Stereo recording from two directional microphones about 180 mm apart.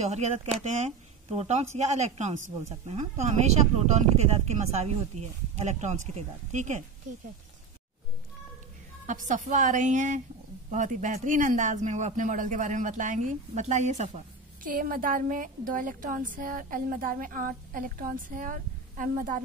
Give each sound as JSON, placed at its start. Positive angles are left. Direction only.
{"t": 0.0, "sound": "a woman's voice", "side_deg": -40}
{"t": 9.0, "sound": "a woman's voice", "side_deg": -45}
{"t": 14.6, "sound": "a woman's voice", "side_deg": -50}